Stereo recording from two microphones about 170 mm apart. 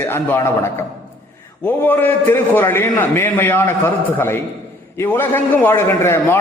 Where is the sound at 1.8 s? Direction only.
10° left (ahead or behind).